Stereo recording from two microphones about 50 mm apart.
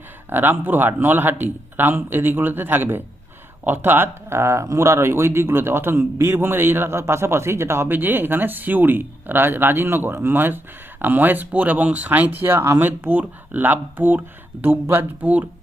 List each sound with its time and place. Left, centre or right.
0.3 s a man's voice: right
7.0 s speech: right
7.9 s a man's voice: right